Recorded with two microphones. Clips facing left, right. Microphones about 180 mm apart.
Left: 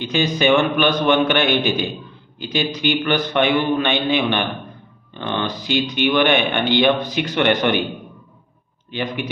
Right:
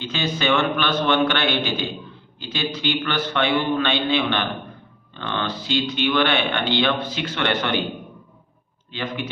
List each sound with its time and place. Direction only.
0.0 s speech: 15° left (ahead or behind)
8.9 s speech: 15° left (ahead or behind)